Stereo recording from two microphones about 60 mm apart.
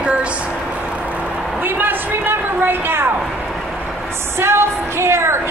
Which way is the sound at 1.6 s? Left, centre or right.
Right.